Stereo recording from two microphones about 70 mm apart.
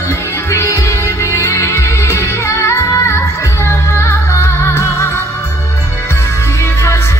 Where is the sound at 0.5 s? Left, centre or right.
Left.